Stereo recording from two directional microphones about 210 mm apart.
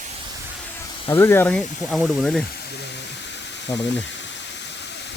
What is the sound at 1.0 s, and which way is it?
Speech, 15° left (ahead or behind).